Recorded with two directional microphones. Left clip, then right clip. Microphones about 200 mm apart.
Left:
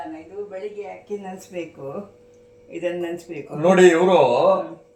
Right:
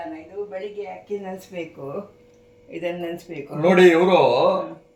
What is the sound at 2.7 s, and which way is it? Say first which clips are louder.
Speech: left 2 dB; 20° right (ahead or behind).